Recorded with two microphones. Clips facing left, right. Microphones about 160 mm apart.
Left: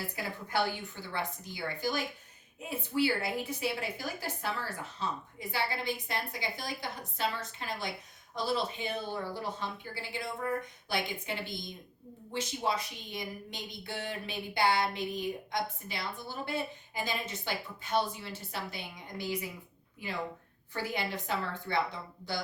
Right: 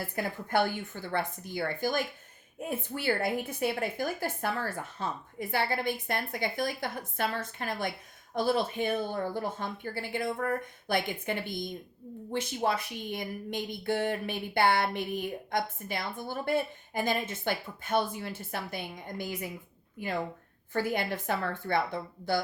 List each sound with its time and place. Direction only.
0.2 s a woman's voice: 50° right (ahead or behind)